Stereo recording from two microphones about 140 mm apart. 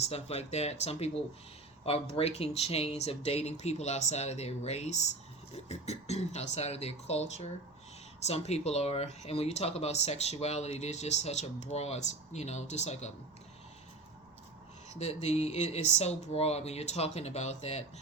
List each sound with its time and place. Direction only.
0.0 s speech: 50° left (ahead or behind)
14.8 s speech: 50° left (ahead or behind)